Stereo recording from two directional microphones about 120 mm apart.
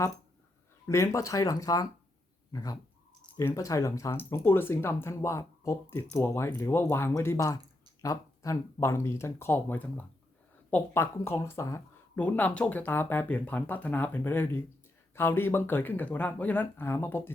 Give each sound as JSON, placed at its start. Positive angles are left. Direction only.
{"t": 0.9, "sound": "speech", "side_deg": 25}
{"t": 12.1, "sound": "speech", "side_deg": 15}